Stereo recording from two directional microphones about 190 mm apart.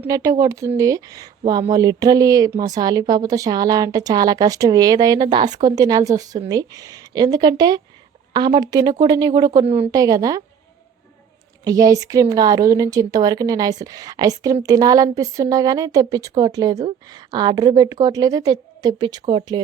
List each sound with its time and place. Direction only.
0.0 s speech: 20° right (ahead or behind)
11.6 s speech: 20° right (ahead or behind)